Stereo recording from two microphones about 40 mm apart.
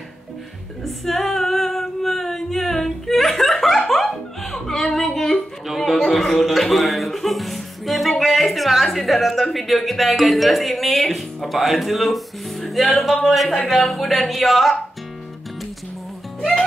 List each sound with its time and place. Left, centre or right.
0.8 s female singing: centre
3.9 s music: centre
13.7 s speech: centre
16.3 s music: centre